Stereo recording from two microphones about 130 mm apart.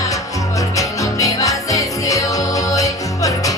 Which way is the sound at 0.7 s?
25° left (ahead or behind).